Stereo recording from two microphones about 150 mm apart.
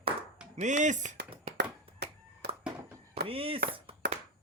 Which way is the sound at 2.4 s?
90° right.